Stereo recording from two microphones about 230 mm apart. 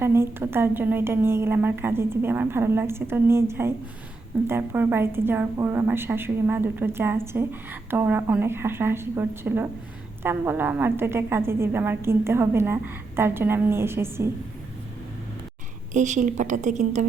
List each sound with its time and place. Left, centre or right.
0.0 s a woman's voice: centre
15.9 s a woman's voice: right